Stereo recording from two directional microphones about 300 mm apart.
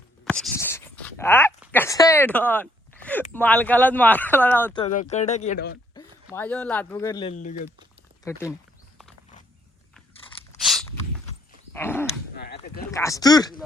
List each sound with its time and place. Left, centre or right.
0.3 s speech: centre
4.8 s speech: left
6.3 s speech: centre; by 7.7 s left
8.3 s speech: centre
11.7 s dog: centre
12.4 s dog: left
12.9 s speech: centre